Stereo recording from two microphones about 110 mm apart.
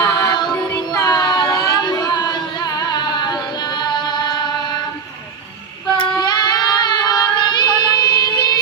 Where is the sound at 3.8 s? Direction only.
40° left (ahead or behind).